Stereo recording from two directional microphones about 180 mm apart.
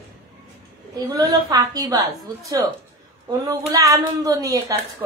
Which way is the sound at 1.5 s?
20° right (ahead or behind).